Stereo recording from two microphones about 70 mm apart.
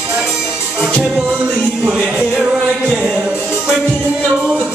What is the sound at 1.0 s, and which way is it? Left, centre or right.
Music, centre.